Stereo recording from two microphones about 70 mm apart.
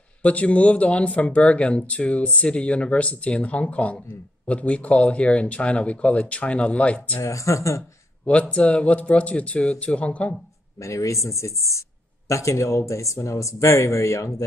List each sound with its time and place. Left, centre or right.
0.2 s speech: centre
7.2 s speech: left
8.3 s speech: centre
10.8 s speech: left